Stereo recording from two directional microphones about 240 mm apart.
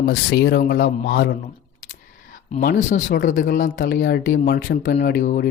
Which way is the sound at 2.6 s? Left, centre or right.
Left.